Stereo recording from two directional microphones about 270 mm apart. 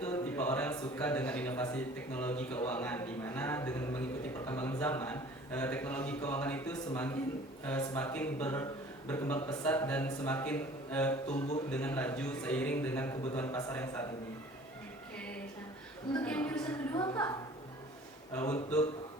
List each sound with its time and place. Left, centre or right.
0.0 s a man's voice: centre
16.2 s a woman's voice: centre